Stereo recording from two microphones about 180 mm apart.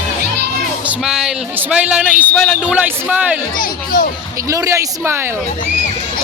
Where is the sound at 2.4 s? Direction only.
5° right (ahead or behind).